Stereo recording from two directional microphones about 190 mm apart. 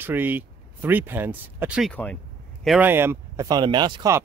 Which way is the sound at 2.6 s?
10° right (ahead or behind).